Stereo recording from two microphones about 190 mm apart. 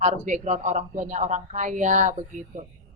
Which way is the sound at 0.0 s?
40° right (ahead or behind).